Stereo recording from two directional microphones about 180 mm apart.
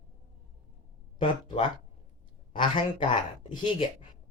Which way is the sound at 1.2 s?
30° left (ahead or behind).